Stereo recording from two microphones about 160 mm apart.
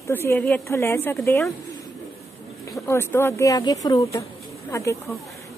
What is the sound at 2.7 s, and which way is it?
Speech, 15° left (ahead or behind).